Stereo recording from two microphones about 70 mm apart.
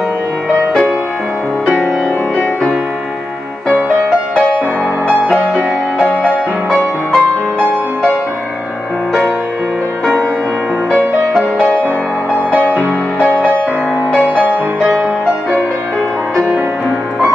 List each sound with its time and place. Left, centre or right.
5.9 s music: centre
12.4 s music: centre
14.8 s music: centre